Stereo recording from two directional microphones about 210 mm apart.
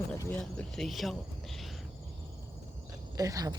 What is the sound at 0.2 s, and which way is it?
Speech, 5° left (ahead or behind).